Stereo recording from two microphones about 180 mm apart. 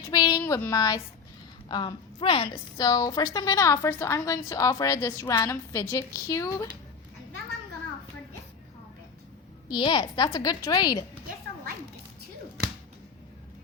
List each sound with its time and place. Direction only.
0.1 s a sound: 20° left (ahead or behind)
1.6 s a woman's voice: 25° left (ahead or behind)
9.6 s a woman's voice: 25° left (ahead or behind)